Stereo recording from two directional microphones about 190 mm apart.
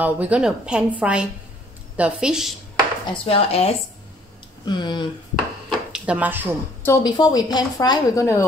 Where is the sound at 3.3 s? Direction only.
30° left (ahead or behind).